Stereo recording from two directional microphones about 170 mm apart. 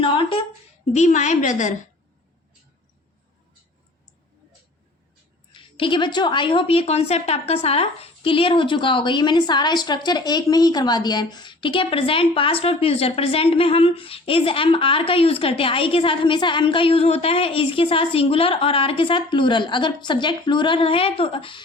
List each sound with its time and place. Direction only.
0.0 s a sound: 30° left (ahead or behind)
0.9 s a woman's voice: 40° left (ahead or behind)
5.5 s a woman's voice: 30° left (ahead or behind)